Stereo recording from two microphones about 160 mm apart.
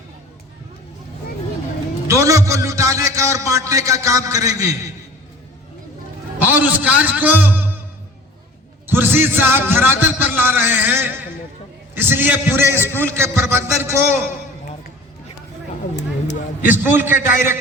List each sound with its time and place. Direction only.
2.0 s a man's voice: 20° right (ahead or behind)
6.4 s a man's voice: 10° right (ahead or behind)
8.9 s speech: 15° right (ahead or behind)
16.0 s a sound: 90° left
16.6 s speech: 10° right (ahead or behind)